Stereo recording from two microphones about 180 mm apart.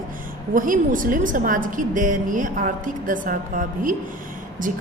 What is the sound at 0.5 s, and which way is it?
A woman's voice, 50° right (ahead or behind).